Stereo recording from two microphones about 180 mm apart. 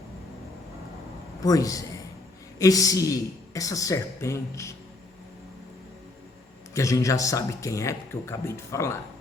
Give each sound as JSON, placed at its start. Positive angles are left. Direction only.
{"t": 1.4, "sound": "a man's voice", "side_deg": 20}
{"t": 6.7, "sound": "speech", "side_deg": 15}